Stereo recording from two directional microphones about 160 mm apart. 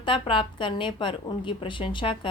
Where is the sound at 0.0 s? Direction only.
30° left (ahead or behind).